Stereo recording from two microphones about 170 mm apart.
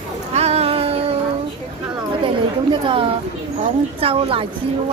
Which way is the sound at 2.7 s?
30° right (ahead or behind).